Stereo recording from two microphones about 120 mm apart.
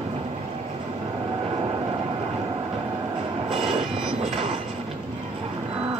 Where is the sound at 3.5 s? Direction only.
55° right (ahead or behind).